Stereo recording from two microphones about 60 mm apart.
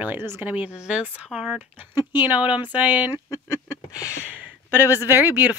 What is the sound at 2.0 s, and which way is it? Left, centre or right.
Speech, right.